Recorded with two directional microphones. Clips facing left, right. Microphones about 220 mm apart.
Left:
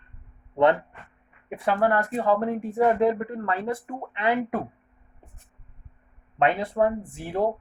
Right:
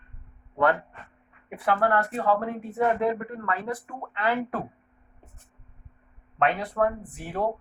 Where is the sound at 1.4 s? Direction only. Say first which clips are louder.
Left 3 dB; 25° left (ahead or behind).